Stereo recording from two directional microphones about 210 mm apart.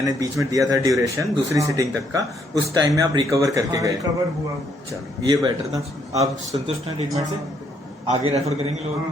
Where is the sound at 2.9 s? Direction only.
15° right (ahead or behind).